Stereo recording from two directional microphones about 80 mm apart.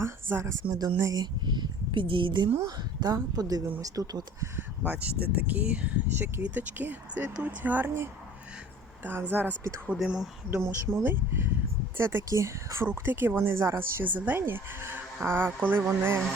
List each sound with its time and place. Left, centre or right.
0.0 s speech: right
0.7 s speech: right
2.6 s speech: right
4.9 s speech: right
9.3 s speech: right
10.0 s speech: centre
10.6 s speech: right